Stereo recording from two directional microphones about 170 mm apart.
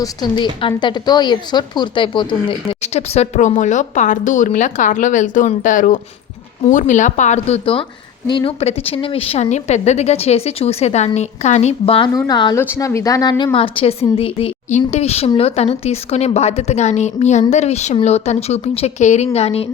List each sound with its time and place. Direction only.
0.0 s a woman's voice: 25° left (ahead or behind)
12.1 s a woman's voice: 20° left (ahead or behind); by 19.6 s 35° left (ahead or behind)